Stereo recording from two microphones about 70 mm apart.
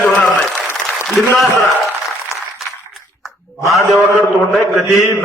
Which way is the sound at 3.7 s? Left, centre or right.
Left.